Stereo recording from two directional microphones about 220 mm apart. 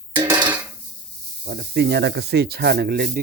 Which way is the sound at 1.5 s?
45° right (ahead or behind).